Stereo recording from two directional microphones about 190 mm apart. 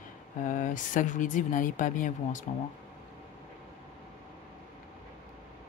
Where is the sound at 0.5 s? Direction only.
45° left (ahead or behind).